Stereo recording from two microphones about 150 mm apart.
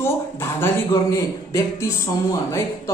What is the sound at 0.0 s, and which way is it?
A woman's voice, 15° left (ahead or behind).